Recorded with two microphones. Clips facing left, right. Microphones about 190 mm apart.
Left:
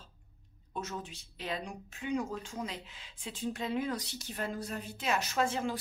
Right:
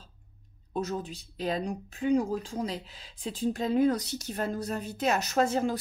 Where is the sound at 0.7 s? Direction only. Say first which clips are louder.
Right 8 dB; 35° right (ahead or behind).